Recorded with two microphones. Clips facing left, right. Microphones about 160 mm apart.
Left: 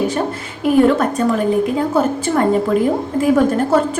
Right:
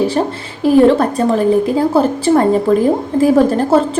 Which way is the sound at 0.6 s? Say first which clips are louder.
Right 3 dB; 30° right (ahead or behind).